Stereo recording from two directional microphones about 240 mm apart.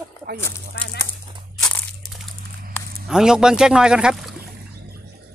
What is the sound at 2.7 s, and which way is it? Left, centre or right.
Speech, centre.